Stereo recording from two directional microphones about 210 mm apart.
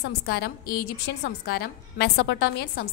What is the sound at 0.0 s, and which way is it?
A woman's voice, 50° left (ahead or behind).